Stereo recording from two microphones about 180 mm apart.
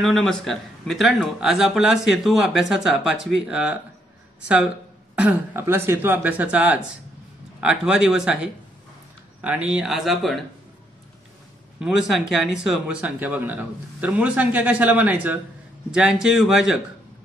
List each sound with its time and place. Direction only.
0.0 s a man's voice: centre (ahead or behind)
5.1 s a man's voice: 10° right (ahead or behind)
9.7 s a man's voice: 5° right (ahead or behind)
11.8 s a man's voice: 5° right (ahead or behind)